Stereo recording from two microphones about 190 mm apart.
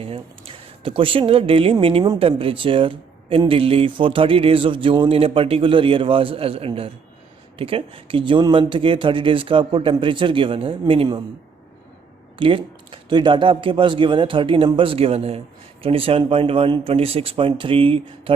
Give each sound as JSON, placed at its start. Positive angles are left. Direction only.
{"t": 0.0, "sound": "speech", "side_deg": -30}
{"t": 12.4, "sound": "speech", "side_deg": -30}